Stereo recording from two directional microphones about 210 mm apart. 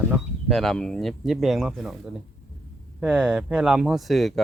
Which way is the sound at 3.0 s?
5° right (ahead or behind).